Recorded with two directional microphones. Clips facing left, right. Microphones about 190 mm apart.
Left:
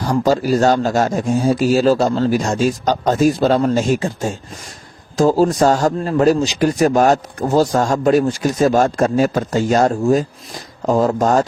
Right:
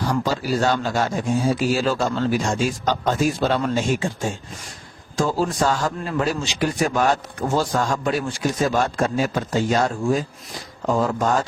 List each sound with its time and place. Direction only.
0.1 s speech: 45° left (ahead or behind)